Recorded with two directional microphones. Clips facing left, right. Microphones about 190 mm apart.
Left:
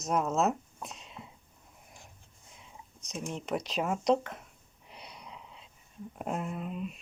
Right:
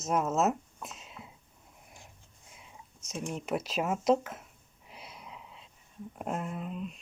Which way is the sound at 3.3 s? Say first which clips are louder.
Right 1 dB; 5° right (ahead or behind).